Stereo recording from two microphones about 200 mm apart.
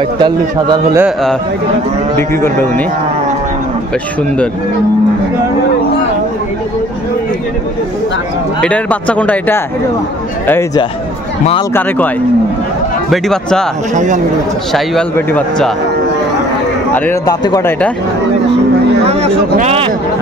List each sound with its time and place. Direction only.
0.2 s a man's voice: 20° right (ahead or behind)
8.5 s speech: 5° left (ahead or behind)
13.1 s a man's voice: 5° left (ahead or behind)
13.9 s speech: 40° right (ahead or behind)
14.7 s a man's voice: 5° left (ahead or behind)
16.9 s speech: 10° left (ahead or behind)
19.0 s a sound: 30° right (ahead or behind)
19.5 s speech: 35° right (ahead or behind)